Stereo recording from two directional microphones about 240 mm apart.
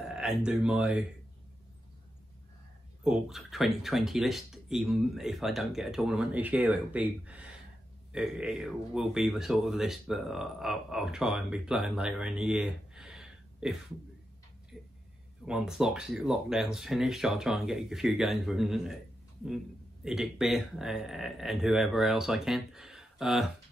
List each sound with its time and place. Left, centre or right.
0.0 s speech: centre
3.0 s speech: centre
15.4 s speech: centre